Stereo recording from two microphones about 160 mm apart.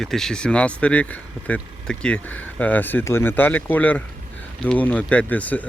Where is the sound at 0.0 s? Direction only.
5° left (ahead or behind).